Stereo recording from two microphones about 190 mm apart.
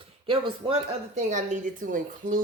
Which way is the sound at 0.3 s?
30° right (ahead or behind).